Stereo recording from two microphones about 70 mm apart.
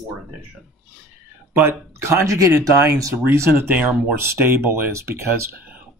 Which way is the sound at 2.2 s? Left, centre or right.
Right.